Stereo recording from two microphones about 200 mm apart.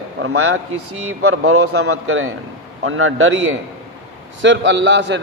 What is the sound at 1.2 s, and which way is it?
A man's voice, 90° right.